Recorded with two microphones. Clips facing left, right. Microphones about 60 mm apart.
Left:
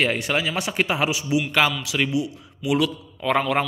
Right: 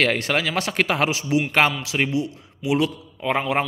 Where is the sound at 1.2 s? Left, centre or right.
Right.